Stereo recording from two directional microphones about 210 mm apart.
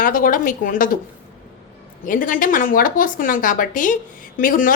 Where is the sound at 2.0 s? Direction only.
40° left (ahead or behind).